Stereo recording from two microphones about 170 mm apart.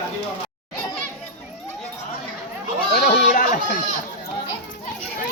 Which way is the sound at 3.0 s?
55° left (ahead or behind).